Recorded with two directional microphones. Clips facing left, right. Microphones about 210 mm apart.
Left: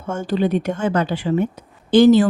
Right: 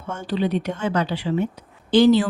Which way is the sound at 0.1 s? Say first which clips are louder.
Left 4 dB; 45° left (ahead or behind).